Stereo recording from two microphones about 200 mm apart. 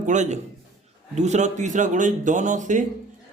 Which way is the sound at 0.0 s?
35° right (ahead or behind).